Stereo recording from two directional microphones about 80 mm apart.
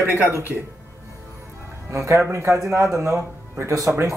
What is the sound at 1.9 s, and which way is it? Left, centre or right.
Speech, right.